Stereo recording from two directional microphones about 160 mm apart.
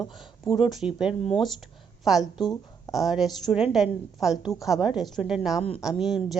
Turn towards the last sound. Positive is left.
turn(degrees=0)  # may be behind; listen again after turning